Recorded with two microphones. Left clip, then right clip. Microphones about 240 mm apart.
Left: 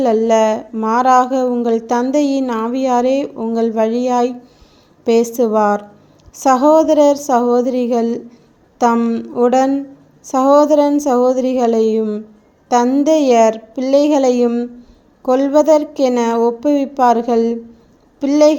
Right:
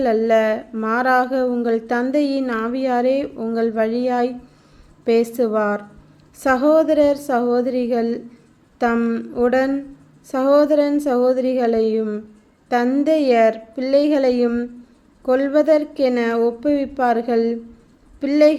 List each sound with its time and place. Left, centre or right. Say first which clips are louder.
0.0 s speech: left 4 dB; centre